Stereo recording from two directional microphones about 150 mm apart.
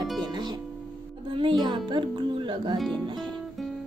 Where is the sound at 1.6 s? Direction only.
30° right (ahead or behind).